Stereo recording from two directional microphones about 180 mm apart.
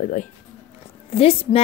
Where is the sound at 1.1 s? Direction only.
30° left (ahead or behind).